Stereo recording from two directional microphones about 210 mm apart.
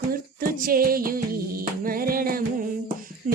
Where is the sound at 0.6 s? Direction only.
45° right (ahead or behind).